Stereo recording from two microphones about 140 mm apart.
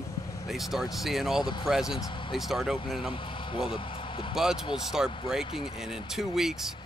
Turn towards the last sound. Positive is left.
turn(degrees=-5)  # may be behind; listen again after turning